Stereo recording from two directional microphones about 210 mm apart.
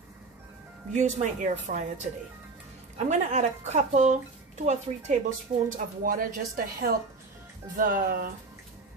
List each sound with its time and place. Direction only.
0.9 s speech: 35° right (ahead or behind)
3.1 s a woman's voice: 35° right (ahead or behind)